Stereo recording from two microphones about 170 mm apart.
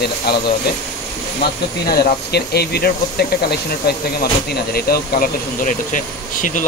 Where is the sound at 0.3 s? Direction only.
70° left (ahead or behind).